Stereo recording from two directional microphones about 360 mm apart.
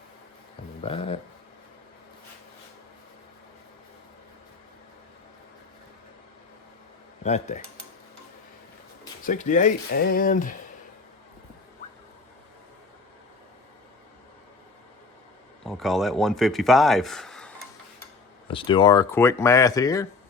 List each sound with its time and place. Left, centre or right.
0.8 s speech: centre
7.3 s speech: centre
9.2 s speech: left
15.6 s speech: centre
18.4 s speech: centre